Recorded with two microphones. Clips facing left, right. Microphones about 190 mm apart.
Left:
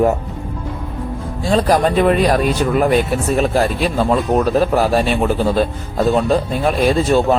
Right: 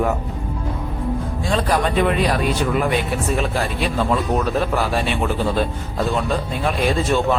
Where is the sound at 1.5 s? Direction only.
40° left (ahead or behind).